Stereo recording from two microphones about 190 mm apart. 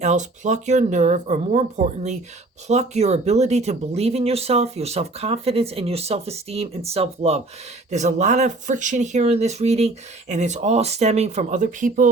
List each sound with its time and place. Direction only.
0.0 s speech: 40° right (ahead or behind)